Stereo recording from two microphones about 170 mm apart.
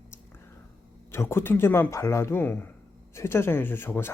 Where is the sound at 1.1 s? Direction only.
15° left (ahead or behind).